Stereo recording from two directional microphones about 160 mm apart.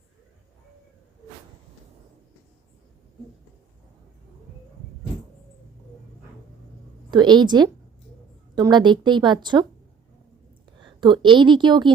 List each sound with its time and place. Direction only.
7.1 s a woman's voice: 30° right (ahead or behind)
10.8 s a woman's voice: 30° right (ahead or behind)